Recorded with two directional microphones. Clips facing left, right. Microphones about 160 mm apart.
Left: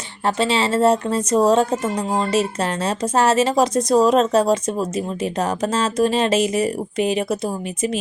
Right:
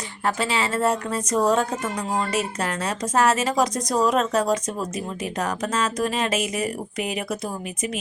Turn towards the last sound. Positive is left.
turn(degrees=30)  # may be behind; listen again after turning